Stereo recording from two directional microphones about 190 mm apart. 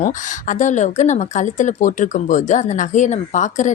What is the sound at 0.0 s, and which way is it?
Speech, 40° left (ahead or behind).